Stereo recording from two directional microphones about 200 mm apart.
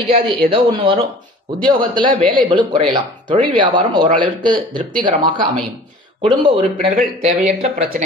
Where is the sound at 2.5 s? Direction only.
25° right (ahead or behind).